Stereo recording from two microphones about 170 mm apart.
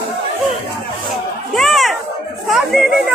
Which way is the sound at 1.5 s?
Centre (ahead or behind).